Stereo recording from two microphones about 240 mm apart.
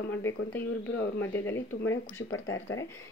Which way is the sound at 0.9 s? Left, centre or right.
Left.